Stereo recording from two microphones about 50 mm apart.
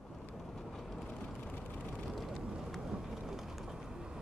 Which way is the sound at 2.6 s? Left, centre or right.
Centre.